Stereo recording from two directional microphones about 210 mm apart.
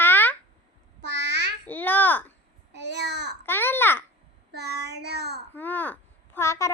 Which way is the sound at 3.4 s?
10° left (ahead or behind).